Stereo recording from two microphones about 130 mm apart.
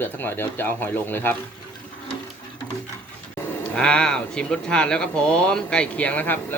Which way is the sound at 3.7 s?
5° left (ahead or behind).